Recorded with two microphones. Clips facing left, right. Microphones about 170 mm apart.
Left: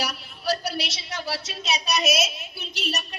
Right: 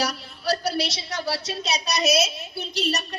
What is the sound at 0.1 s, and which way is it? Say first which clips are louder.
A woman's voice: right 1 dB; 35° right (ahead or behind).